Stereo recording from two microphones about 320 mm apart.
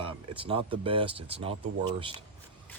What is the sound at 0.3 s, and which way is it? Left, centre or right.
Speech, centre.